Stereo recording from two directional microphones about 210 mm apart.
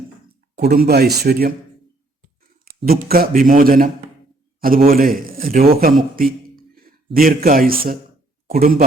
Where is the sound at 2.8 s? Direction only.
45° right (ahead or behind).